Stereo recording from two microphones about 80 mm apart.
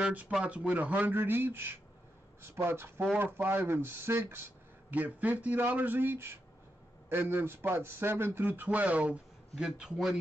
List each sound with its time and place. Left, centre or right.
0.0 s speech: centre
9.7 s speech: centre